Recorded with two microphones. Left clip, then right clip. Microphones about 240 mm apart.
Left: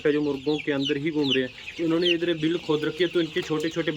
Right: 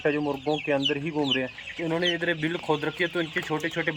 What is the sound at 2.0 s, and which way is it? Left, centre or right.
Speech, centre.